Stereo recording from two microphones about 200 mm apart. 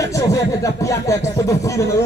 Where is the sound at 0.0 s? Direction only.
15° left (ahead or behind).